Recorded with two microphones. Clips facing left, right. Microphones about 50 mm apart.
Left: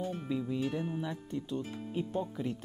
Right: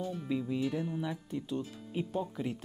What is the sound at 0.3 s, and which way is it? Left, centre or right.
A man's voice, centre.